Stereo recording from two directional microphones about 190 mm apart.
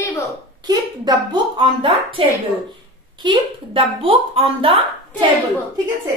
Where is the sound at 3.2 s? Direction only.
25° right (ahead or behind).